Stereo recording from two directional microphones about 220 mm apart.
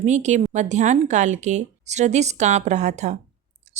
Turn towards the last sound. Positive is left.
turn(degrees=-30)  # may be behind; listen again after turning